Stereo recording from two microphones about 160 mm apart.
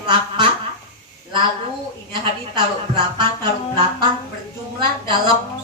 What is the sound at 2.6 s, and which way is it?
Speech, 30° right (ahead or behind).